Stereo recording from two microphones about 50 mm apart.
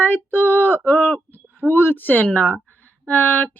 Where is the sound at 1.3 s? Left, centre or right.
Left.